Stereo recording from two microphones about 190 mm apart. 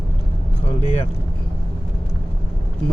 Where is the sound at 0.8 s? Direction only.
30° left (ahead or behind).